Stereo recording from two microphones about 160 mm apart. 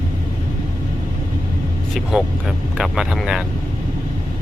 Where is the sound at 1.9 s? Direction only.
Centre (ahead or behind).